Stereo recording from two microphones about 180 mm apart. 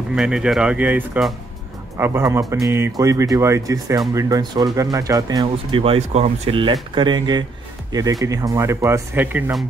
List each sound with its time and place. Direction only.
0.1 s speech: 5° right (ahead or behind)